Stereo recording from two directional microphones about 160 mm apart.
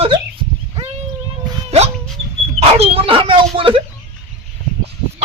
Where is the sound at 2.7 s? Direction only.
40° right (ahead or behind).